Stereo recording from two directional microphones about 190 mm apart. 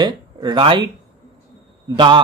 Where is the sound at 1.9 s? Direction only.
25° right (ahead or behind).